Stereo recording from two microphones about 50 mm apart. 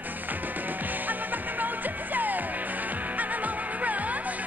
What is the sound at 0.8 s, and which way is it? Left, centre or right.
Music, right.